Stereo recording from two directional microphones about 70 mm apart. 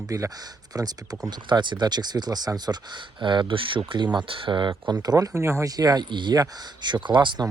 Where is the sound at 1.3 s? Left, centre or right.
Right.